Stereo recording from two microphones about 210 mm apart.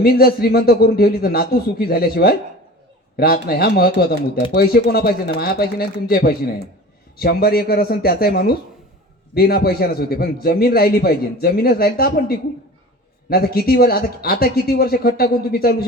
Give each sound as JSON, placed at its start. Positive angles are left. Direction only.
{"t": 0.0, "sound": "a man's voice", "side_deg": 45}